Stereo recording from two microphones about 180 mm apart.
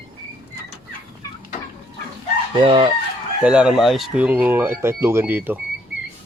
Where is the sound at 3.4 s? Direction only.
5° right (ahead or behind).